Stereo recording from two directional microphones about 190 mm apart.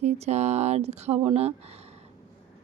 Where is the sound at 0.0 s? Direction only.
35° right (ahead or behind).